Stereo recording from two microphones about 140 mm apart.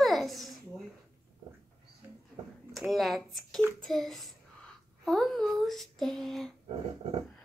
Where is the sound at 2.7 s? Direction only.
Centre (ahead or behind).